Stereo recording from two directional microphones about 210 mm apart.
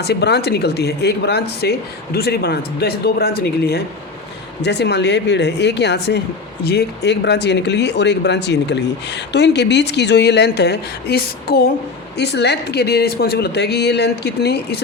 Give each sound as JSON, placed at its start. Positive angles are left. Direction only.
{"t": 0.0, "sound": "speech", "side_deg": 50}